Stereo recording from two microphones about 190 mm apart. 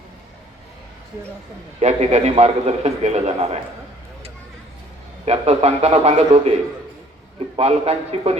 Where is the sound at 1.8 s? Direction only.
35° right (ahead or behind).